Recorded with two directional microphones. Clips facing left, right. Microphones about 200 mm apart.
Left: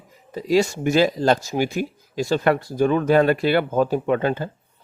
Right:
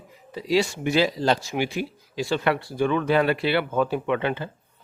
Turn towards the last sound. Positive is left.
turn(degrees=40)  # may be behind; listen again after turning